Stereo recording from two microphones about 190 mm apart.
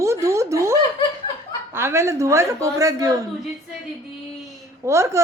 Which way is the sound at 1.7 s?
15° right (ahead or behind).